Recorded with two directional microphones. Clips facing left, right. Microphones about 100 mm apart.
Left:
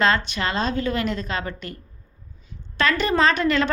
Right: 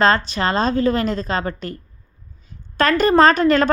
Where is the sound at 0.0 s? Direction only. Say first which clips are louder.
Right 4 dB; 35° right (ahead or behind).